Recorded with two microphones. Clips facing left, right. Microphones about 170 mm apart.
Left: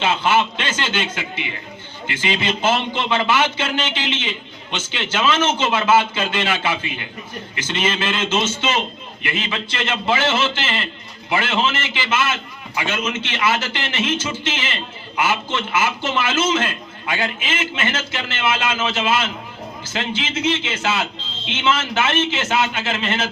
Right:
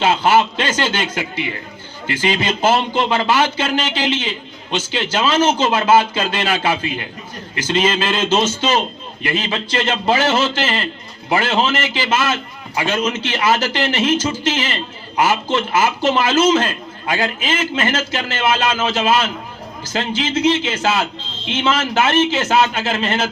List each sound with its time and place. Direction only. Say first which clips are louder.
0.0 s a man's voice: right 4 dB; 40° right (ahead or behind)